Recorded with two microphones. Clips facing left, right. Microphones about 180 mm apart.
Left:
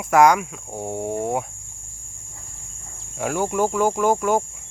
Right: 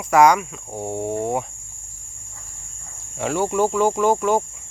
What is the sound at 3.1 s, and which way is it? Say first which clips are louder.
Cricket: right 1 dB; 5° left (ahead or behind).